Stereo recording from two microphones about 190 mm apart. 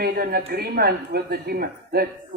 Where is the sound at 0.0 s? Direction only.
50° right (ahead or behind).